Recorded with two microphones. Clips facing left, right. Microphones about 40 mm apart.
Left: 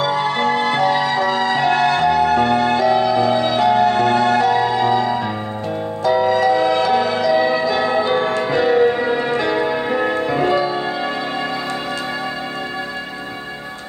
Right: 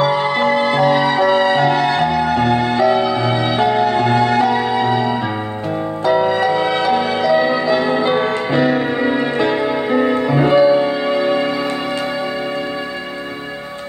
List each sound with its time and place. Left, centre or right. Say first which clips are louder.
0.0 s music: right 3 dB; right
7.3 s change ringing: right 1 dB; centre
7.7 s music: right 2 dB; centre
8.0 s music: right 1 dB; right